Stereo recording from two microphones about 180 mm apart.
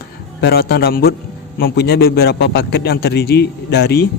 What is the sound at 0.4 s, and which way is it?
A man's voice, 60° left (ahead or behind).